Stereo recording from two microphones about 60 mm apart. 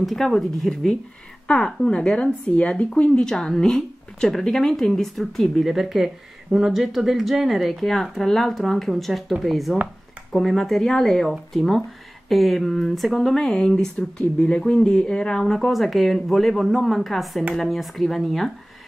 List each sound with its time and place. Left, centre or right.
0.0 s speech: centre